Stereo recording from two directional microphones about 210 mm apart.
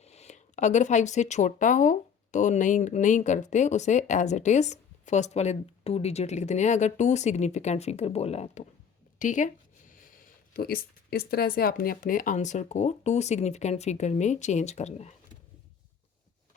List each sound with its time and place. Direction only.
0.0 s speech: 30° left (ahead or behind)
10.5 s speech: 45° left (ahead or behind)